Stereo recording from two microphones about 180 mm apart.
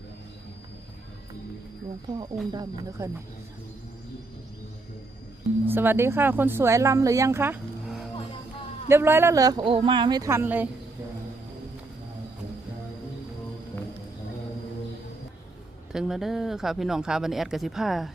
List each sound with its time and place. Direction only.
2.5 s speech: 20° right (ahead or behind)
5.6 s speech: 10° right (ahead or behind)
8.9 s speech: 15° right (ahead or behind)
15.9 s speech: centre (ahead or behind)